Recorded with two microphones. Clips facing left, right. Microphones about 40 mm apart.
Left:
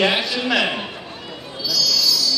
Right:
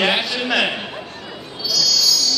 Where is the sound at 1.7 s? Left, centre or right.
Centre.